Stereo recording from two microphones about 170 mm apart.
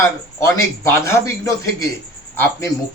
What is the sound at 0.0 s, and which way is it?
A man's voice, 15° left (ahead or behind).